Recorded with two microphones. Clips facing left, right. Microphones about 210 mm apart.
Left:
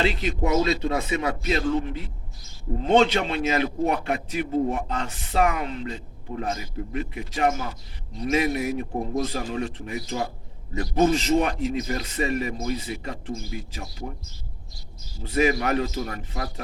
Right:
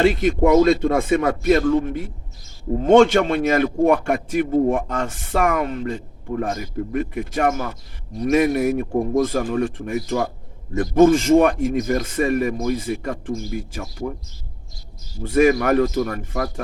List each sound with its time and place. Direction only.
0.0 s a man's voice: 50° right (ahead or behind)
15.2 s a man's voice: 50° right (ahead or behind)